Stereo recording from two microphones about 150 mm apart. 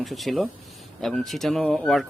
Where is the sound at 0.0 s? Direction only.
Centre (ahead or behind).